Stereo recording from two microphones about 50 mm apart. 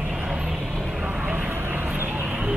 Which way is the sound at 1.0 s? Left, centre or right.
Right.